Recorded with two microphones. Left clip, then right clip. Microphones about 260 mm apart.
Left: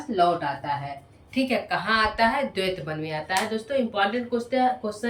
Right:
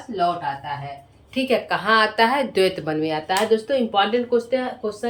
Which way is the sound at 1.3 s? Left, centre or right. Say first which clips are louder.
Right 4 dB; centre.